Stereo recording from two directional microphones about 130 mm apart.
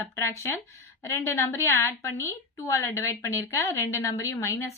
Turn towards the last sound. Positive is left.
turn(degrees=20)  # may be behind; listen again after turning